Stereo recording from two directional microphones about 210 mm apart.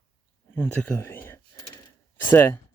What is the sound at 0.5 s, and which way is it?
Speech, 10° left (ahead or behind).